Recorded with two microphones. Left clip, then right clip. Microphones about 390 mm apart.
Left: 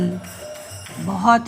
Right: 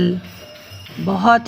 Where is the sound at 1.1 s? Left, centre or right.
Centre.